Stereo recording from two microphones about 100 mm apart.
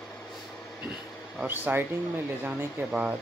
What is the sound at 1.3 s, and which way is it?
Speech, 20° right (ahead or behind).